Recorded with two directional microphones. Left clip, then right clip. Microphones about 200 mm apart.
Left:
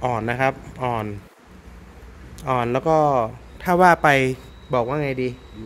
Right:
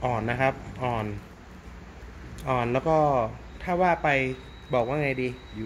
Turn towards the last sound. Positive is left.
turn(degrees=25)  # may be behind; listen again after turning